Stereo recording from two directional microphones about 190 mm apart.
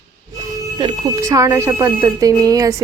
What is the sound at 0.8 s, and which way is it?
Speech, 25° right (ahead or behind).